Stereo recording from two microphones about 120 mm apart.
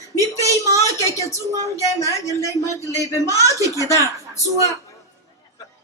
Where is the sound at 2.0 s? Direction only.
25° left (ahead or behind).